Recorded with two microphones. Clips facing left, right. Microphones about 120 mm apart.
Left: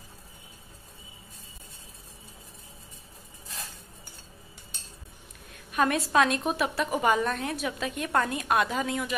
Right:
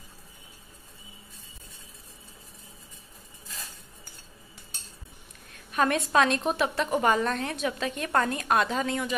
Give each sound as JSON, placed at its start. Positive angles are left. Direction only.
{"t": 5.7, "sound": "a woman's voice", "side_deg": 5}